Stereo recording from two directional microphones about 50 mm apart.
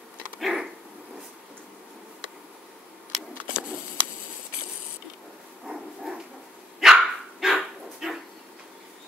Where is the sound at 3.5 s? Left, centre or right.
Centre.